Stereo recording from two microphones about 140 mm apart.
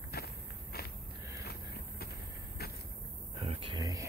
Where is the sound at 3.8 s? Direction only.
25° right (ahead or behind).